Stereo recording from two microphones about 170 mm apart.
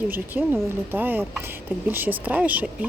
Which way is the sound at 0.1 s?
10° right (ahead or behind).